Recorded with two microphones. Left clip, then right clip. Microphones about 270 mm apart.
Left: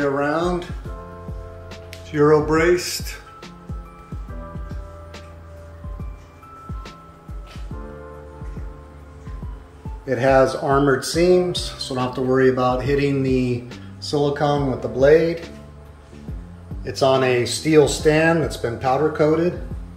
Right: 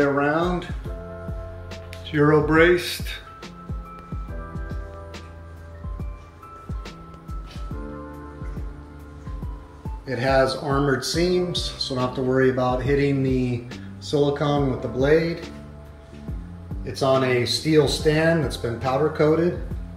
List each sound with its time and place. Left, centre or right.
0.0 s speech: centre
1.7 s music: centre
10.0 s speech: centre
16.8 s speech: centre